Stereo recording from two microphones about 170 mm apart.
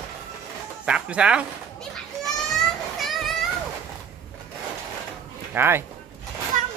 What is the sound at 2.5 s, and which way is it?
Children playing, centre (ahead or behind).